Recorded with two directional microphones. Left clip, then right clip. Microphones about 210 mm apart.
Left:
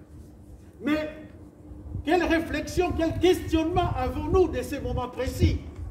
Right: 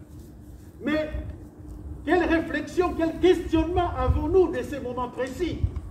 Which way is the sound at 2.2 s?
60° left (ahead or behind).